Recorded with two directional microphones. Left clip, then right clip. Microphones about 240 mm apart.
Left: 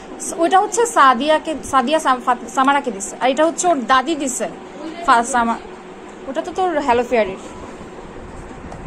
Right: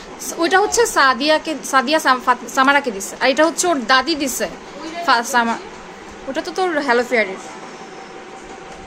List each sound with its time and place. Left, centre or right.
0.3 s a woman's voice: centre